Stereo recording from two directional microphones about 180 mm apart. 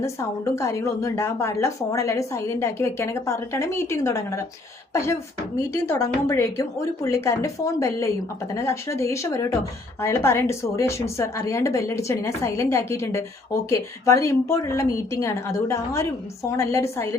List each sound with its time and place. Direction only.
0.0 s speech: 15° left (ahead or behind)
5.7 s speech: 15° left (ahead or behind)